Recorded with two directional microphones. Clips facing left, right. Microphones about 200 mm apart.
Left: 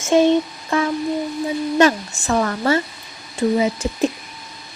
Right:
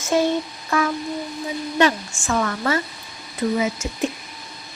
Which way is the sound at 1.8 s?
35° left (ahead or behind).